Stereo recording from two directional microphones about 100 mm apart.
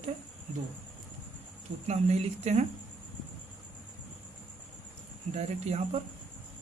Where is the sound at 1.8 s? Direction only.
90° right.